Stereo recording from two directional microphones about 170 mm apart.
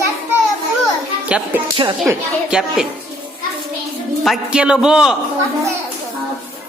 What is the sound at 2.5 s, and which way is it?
Speech, 5° right (ahead or behind).